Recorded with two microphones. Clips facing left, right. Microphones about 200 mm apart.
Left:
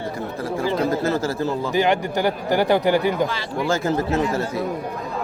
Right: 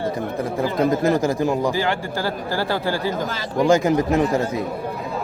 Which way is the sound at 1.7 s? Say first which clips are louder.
Left 4 dB; 20° left (ahead or behind).